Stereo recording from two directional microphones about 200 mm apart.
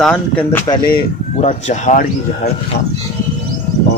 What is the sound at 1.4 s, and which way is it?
Speech, 35° left (ahead or behind).